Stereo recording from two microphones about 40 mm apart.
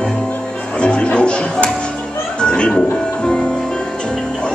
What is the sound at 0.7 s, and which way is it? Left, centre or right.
Music, left.